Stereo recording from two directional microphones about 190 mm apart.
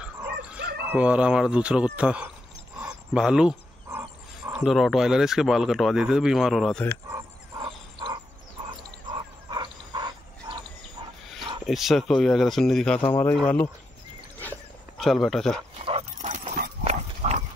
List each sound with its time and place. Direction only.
0.0 s dog: 5° right (ahead or behind)
0.8 s speech: 5° right (ahead or behind)
2.8 s a sound: 5° right (ahead or behind)
4.6 s speech: centre (ahead or behind)
7.1 s dog: 15° right (ahead or behind)
7.6 s wild animals: 25° right (ahead or behind)
11.6 s speech: centre (ahead or behind)
15.0 s speech: centre (ahead or behind)
15.8 s dog: 30° right (ahead or behind)
16.8 s clip-clop: 35° right (ahead or behind)